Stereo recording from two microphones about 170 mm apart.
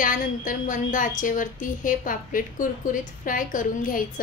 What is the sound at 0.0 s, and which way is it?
A woman's voice, 50° left (ahead or behind).